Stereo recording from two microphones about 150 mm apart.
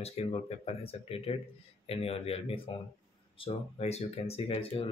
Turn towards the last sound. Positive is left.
turn(degrees=40)  # may be behind; listen again after turning